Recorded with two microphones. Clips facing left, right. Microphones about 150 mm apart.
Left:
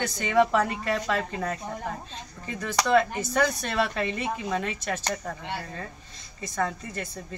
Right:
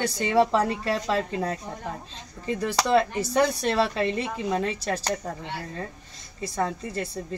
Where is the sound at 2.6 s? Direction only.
30° right (ahead or behind).